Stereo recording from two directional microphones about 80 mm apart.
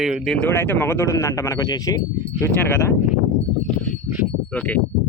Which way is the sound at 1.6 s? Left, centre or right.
Left.